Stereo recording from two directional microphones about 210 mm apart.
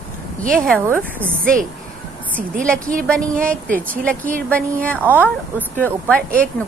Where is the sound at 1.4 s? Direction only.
40° right (ahead or behind).